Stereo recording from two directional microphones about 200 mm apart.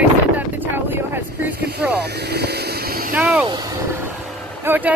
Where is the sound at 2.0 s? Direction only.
55° right (ahead or behind).